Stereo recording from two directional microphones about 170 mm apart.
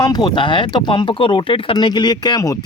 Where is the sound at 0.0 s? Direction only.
25° left (ahead or behind).